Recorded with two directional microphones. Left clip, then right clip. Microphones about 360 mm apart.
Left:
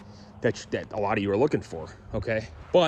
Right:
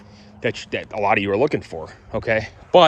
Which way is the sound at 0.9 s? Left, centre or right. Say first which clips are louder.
Right 8 dB; centre.